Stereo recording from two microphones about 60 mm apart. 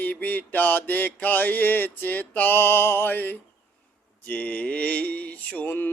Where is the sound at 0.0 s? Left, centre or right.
Left.